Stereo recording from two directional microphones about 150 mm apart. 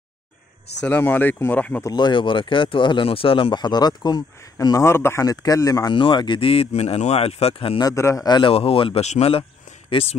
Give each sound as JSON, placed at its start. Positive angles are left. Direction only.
{"t": 0.8, "sound": "speech", "side_deg": 10}
{"t": 1.9, "sound": "speech", "side_deg": 30}
{"t": 7.8, "sound": "speech", "side_deg": 20}